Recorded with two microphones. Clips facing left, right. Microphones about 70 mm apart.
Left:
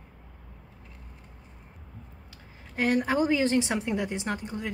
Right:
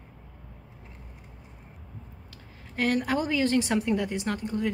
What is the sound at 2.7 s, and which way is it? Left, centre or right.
A woman's voice, centre.